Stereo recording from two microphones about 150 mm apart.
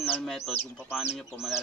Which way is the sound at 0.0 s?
15° left (ahead or behind).